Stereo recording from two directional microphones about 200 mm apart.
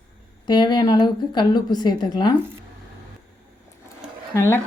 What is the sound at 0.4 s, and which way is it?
Speech, 20° left (ahead or behind).